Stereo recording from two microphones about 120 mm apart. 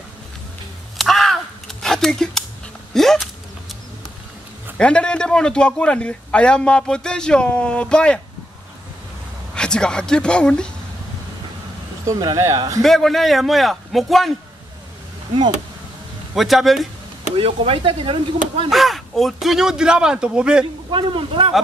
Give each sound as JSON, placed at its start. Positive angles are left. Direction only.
{"t": 0.9, "sound": "a sound", "side_deg": 0}
{"t": 4.7, "sound": "a man's voice", "side_deg": 10}
{"t": 9.6, "sound": "a man's voice", "side_deg": 5}
{"t": 12.1, "sound": "speech", "side_deg": -30}
{"t": 12.8, "sound": "speech", "side_deg": 5}
{"t": 16.3, "sound": "speech", "side_deg": 0}
{"t": 17.4, "sound": "speech", "side_deg": -50}
{"t": 18.7, "sound": "speech", "side_deg": 0}
{"t": 20.9, "sound": "speech", "side_deg": -45}